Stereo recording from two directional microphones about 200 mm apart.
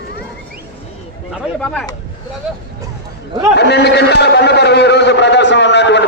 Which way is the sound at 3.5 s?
55° left (ahead or behind).